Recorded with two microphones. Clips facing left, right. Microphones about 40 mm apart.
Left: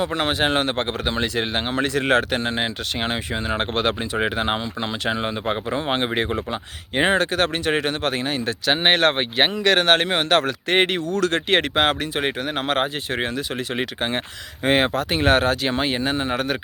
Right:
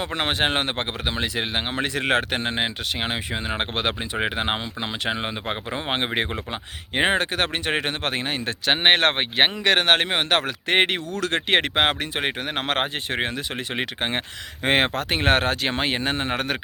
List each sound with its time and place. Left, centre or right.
0.0 s speech: right
1.0 s speech: centre; by 2.6 s right
3.0 s speech: centre; by 9.5 s right
9.6 s speech: right
12.5 s speech: right
14.6 s speech: right